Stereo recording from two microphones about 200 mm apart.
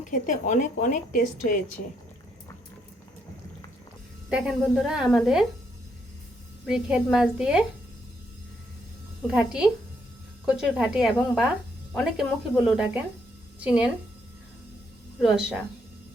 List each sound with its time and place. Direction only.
0.1 s a woman's voice: 40° left (ahead or behind)
4.3 s a woman's voice: 5° right (ahead or behind)
6.7 s a woman's voice: 5° right (ahead or behind)
9.2 s a woman's voice: centre (ahead or behind)
15.2 s a woman's voice: 5° right (ahead or behind)